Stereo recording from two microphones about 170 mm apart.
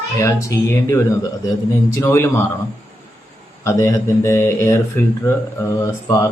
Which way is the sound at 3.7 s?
15° left (ahead or behind).